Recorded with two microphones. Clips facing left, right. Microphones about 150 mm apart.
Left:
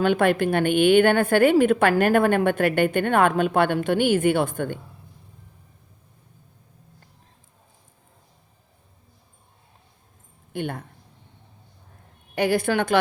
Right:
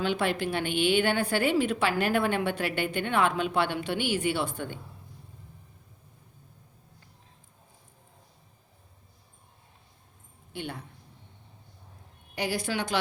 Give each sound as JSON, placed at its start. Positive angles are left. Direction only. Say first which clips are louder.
{"t": 0.0, "sound": "a woman's voice", "louder": "left 8 dB", "side_deg": 50}
{"t": 10.5, "sound": "a woman's voice", "louder": "left 8 dB", "side_deg": 50}
{"t": 12.3, "sound": "a woman's voice", "louder": "left 9 dB", "side_deg": 55}